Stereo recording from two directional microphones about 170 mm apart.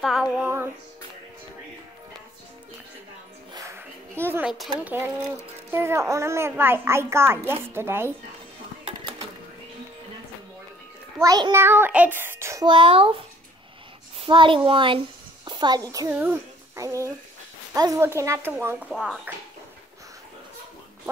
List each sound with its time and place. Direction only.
0.0 s a child's voice: 5° right (ahead or behind)
3.5 s a sound: 15° right (ahead or behind)
4.6 s a child's voice: 10° right (ahead or behind)
8.8 s a sound: 30° right (ahead or behind)
11.1 s a child's voice: 25° right (ahead or behind)
11.6 s a child's voice: 10° right (ahead or behind); by 15.0 s 30° right (ahead or behind)
15.4 s music: 25° right (ahead or behind)
15.9 s a child's voice: 20° right (ahead or behind)
16.2 s a sound: 10° right (ahead or behind)
16.8 s a child's voice: 20° right (ahead or behind)
18.9 s speech: centre (ahead or behind)